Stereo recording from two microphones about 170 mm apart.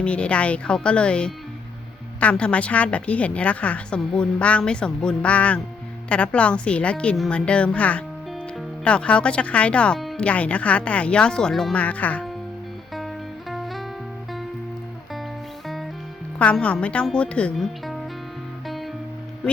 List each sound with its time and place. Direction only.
0.0 s speech: 5° left (ahead or behind)
13.5 s music: centre (ahead or behind)
15.6 s music: centre (ahead or behind)
16.4 s speech: 5° left (ahead or behind)